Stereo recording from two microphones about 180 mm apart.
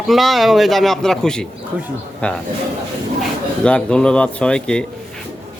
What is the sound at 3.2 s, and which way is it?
Speech, 5° left (ahead or behind).